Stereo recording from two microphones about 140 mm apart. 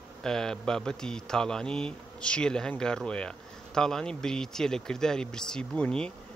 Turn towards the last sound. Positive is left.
turn(degrees=10)  # may be behind; listen again after turning